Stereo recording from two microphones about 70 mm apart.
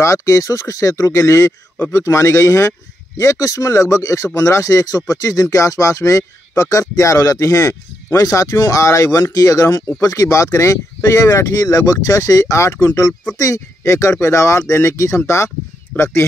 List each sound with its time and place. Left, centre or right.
0.0 s speech: left